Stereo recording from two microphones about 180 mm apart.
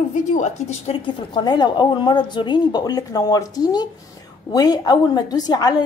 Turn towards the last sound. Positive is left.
turn(degrees=25)  # may be behind; listen again after turning